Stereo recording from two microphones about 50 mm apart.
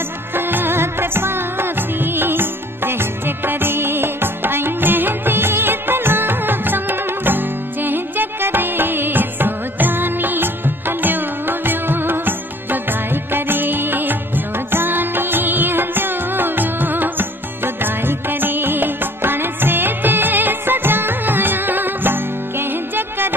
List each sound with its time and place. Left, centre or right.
0.5 s music of bollywood: right
13.1 s music: right